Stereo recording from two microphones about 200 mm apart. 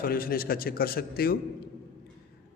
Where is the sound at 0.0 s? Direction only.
50° left (ahead or behind).